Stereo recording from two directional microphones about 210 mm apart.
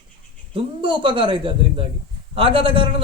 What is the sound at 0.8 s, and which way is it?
A man's voice, 25° right (ahead or behind).